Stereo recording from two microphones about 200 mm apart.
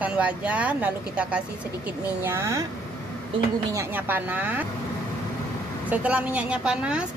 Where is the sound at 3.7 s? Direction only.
10° right (ahead or behind).